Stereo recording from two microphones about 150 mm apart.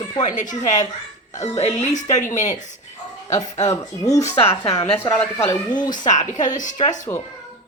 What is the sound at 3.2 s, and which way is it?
Speech, 50° left (ahead or behind).